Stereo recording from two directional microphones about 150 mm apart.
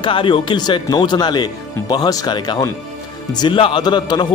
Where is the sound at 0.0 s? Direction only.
35° left (ahead or behind).